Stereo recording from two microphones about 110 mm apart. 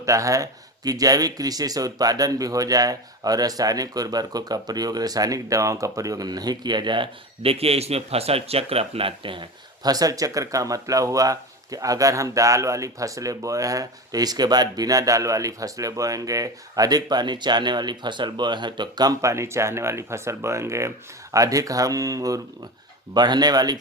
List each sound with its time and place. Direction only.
0.0 s speech: 30° right (ahead or behind); by 9.9 s 50° right (ahead or behind)
9.9 s speech: 35° right (ahead or behind)